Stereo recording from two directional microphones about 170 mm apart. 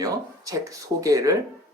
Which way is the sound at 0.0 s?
20° right (ahead or behind).